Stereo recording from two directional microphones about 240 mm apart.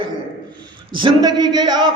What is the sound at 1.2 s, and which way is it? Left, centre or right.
Speech, centre.